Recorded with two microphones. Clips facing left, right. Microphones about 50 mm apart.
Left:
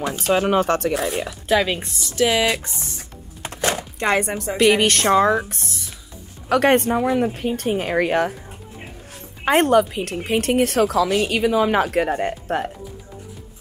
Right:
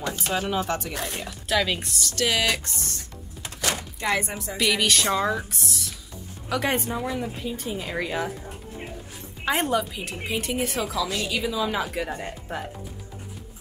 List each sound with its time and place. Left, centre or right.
0.3 s speech: left
1.5 s speech: left
3.4 s chopping: left
4.0 s a woman's voice: left
4.6 s a woman's voice: left
9.4 s a woman's voice: left